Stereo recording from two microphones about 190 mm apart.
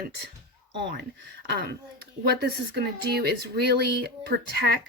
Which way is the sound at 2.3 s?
55° right (ahead or behind).